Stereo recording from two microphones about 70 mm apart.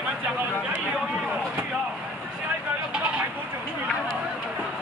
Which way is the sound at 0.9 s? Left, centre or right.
Centre.